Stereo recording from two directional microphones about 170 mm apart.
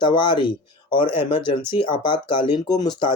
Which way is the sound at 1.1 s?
15° right (ahead or behind).